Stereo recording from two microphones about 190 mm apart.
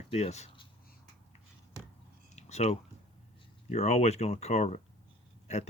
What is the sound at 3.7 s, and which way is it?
Speech, 35° left (ahead or behind).